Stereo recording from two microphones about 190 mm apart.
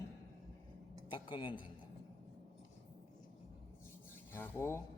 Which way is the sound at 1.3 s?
25° left (ahead or behind).